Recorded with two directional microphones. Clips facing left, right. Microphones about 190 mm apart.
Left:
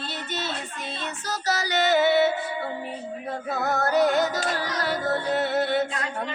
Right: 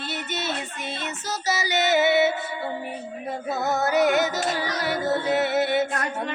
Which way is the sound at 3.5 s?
5° right (ahead or behind).